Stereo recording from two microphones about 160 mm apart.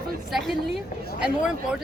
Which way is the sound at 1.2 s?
5° right (ahead or behind).